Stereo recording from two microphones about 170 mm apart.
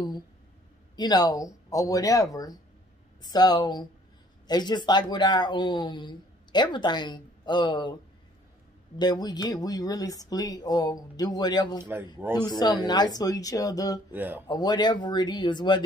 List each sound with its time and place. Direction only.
0.9 s speech: 25° left (ahead or behind)
8.9 s speech: 25° left (ahead or behind)
11.8 s a man's voice: 15° right (ahead or behind)
12.4 s speech: 25° left (ahead or behind)
14.1 s a man's voice: 10° right (ahead or behind)
14.5 s speech: 25° left (ahead or behind)